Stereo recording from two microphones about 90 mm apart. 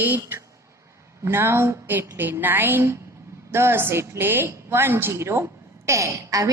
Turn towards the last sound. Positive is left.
turn(degrees=-40)  # may be behind; listen again after turning